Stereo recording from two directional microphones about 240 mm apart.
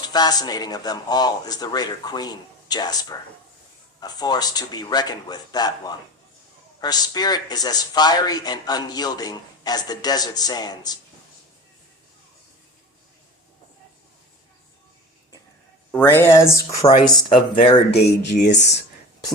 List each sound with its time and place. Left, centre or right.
0.1 s a man's voice: centre
15.9 s a man's voice: centre
16.8 s speech: left